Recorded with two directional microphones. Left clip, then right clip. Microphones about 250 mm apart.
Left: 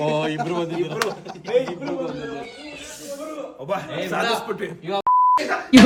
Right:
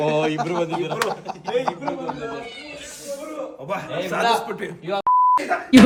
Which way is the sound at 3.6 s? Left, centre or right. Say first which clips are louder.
Left 1 dB; centre.